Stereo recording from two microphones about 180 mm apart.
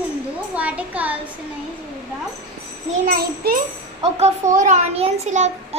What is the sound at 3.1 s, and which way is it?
Speech, 55° right (ahead or behind).